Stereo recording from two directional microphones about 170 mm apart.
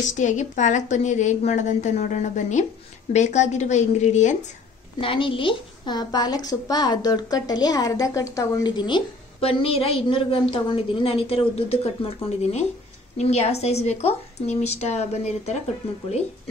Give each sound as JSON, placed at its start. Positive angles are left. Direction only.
{"t": 0.0, "sound": "a woman's voice", "side_deg": 45}
{"t": 5.0, "sound": "a woman's voice", "side_deg": 30}